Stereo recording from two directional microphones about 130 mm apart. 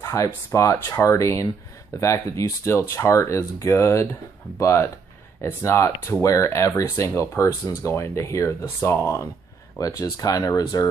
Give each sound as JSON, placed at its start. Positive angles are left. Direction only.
{"t": 0.0, "sound": "speech", "side_deg": 20}